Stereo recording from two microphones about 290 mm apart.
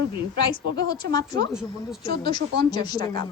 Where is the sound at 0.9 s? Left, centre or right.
Centre.